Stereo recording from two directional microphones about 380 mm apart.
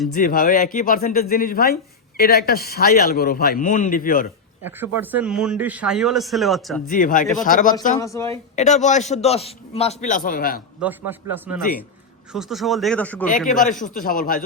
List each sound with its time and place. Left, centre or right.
0.1 s speech: left
4.6 s a man's voice: centre
6.8 s speech: left
7.9 s speech: centre
8.5 s speech: centre
10.8 s a man's voice: centre
13.5 s speech: centre